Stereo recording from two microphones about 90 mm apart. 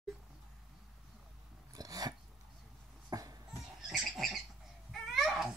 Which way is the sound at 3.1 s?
40° right (ahead or behind).